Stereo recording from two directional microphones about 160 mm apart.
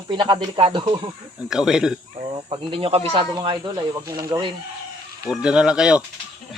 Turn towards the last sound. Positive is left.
turn(degrees=-5)  # may be behind; listen again after turning